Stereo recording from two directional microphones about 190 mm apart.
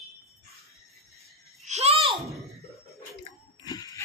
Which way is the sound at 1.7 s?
35° right (ahead or behind).